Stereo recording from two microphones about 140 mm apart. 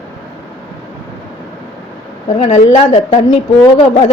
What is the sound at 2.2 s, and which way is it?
A woman's voice, 50° left (ahead or behind).